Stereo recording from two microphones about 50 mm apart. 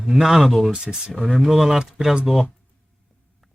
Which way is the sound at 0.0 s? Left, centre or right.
Centre.